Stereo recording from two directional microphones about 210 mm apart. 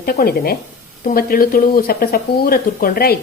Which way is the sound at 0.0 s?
45° left (ahead or behind).